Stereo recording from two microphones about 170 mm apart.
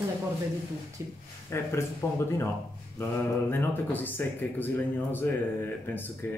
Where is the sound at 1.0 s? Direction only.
20° right (ahead or behind).